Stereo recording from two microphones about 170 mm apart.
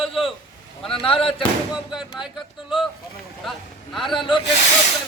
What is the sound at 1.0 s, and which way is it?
Speech, 30° left (ahead or behind).